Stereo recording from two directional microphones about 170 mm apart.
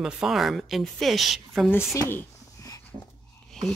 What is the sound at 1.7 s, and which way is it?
Speech, 15° left (ahead or behind).